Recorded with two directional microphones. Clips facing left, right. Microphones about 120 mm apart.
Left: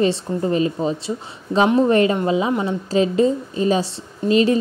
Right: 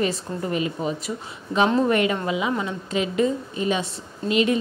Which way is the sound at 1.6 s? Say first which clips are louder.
Left 3 dB; 20° left (ahead or behind).